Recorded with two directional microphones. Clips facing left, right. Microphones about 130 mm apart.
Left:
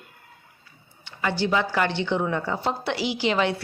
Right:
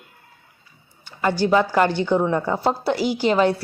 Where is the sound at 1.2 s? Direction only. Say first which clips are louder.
Right 6 dB; 40° right (ahead or behind).